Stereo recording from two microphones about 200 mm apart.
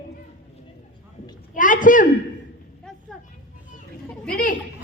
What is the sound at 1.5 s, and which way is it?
Speech, 40° left (ahead or behind).